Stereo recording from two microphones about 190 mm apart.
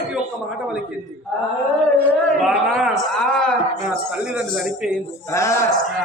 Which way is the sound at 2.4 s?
Centre (ahead or behind).